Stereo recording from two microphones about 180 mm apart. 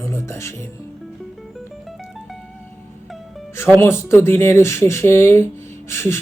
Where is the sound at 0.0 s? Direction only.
15° left (ahead or behind).